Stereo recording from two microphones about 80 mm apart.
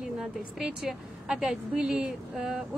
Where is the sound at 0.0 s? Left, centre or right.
Centre.